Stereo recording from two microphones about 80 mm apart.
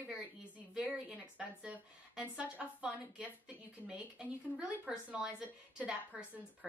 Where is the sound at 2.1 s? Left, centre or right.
Centre.